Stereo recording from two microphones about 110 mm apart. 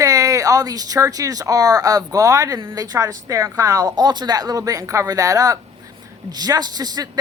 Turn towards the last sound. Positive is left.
turn(degrees=-35)  # may be behind; listen again after turning